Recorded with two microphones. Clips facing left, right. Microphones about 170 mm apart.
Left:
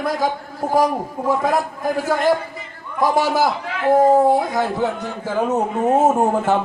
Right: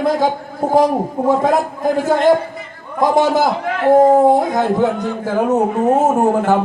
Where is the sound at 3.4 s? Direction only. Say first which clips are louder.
Right 4 dB; 50° right (ahead or behind).